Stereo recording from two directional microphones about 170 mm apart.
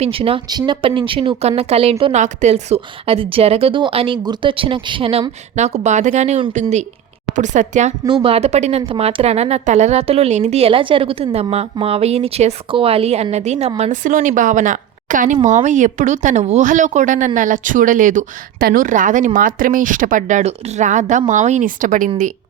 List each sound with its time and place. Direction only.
0.0 s a woman's voice: 35° right (ahead or behind)
8.0 s a woman's voice: 30° right (ahead or behind); by 22.1 s 50° right (ahead or behind)